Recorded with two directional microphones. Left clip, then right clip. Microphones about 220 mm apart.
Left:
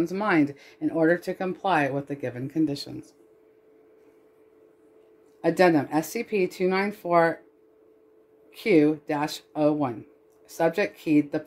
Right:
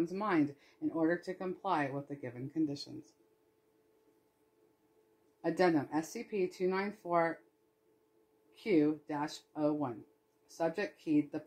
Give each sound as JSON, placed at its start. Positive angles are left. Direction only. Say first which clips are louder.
{"t": 0.0, "sound": "speech", "louder": "left 9 dB", "side_deg": 20}
{"t": 5.4, "sound": "speech", "louder": "left 10 dB", "side_deg": 30}
{"t": 8.6, "sound": "speech", "louder": "left 10 dB", "side_deg": 30}